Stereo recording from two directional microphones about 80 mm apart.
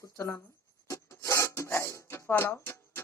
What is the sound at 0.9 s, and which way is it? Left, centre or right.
Filing, left.